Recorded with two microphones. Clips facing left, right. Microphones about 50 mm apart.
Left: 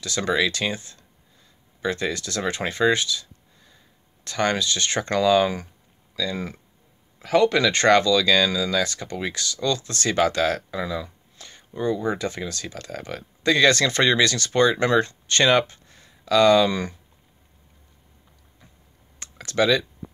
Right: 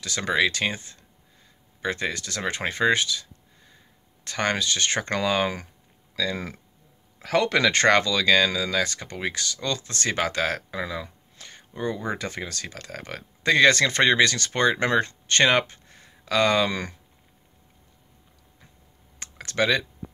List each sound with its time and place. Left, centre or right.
0.0 s speech: right
6.1 s speech: right
19.1 s computer keyboard: right